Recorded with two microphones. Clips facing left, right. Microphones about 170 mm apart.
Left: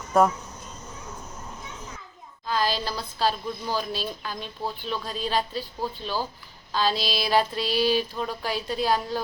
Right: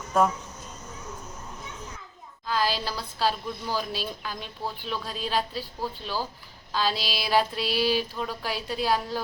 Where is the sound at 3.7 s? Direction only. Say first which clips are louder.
Left 1 dB; 10° right (ahead or behind).